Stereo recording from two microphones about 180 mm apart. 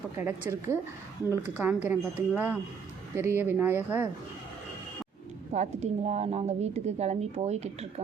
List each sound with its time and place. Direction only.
0.2 s speech: 15° right (ahead or behind)
5.5 s a woman's voice: 40° right (ahead or behind)